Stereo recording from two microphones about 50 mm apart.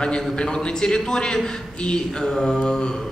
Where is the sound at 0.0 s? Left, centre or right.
Centre.